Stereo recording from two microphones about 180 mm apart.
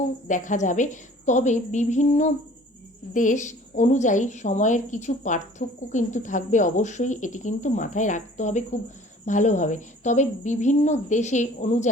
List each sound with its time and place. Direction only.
0.3 s a woman's voice: 45° left (ahead or behind)